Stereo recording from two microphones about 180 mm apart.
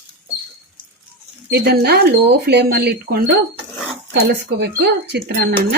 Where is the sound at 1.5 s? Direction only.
60° right (ahead or behind).